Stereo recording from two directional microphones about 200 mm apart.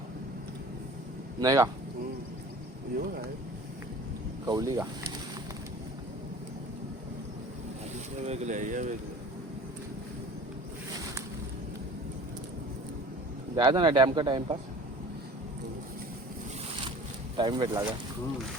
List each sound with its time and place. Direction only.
1.4 s speech: 15° right (ahead or behind)
4.4 s speech: 20° right (ahead or behind)
8.2 s speech: 35° right (ahead or behind)
13.6 s speech: 20° right (ahead or behind)
17.3 s speech: 25° right (ahead or behind)